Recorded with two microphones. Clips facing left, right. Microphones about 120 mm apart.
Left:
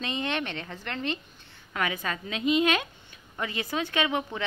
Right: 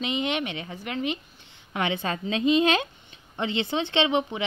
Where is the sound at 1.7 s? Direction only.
25° right (ahead or behind).